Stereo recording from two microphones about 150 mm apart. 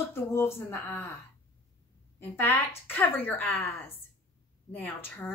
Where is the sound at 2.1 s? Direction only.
15° left (ahead or behind).